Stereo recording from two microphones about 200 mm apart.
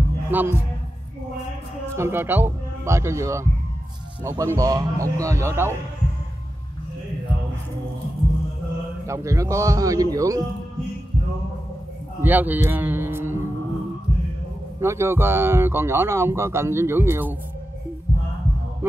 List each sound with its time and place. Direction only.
0.3 s speech: 10° right (ahead or behind)
2.0 s speech: 10° right (ahead or behind)
9.0 s speech: 15° right (ahead or behind)
12.2 s a man's voice: 10° right (ahead or behind)
14.8 s speech: 15° right (ahead or behind)